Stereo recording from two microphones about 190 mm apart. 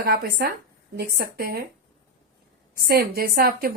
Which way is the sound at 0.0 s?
50° right (ahead or behind).